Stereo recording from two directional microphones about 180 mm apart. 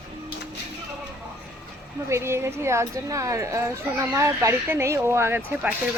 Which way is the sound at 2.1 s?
15° right (ahead or behind).